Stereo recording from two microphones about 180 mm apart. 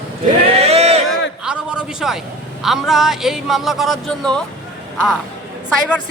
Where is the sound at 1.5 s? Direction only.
5° right (ahead or behind).